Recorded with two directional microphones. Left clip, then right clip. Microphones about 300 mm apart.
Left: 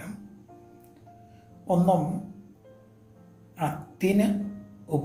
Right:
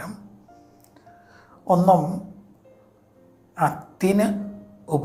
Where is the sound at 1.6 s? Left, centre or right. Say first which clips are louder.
Right 7 dB; right.